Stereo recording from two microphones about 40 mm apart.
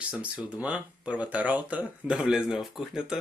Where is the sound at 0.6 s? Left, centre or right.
Right.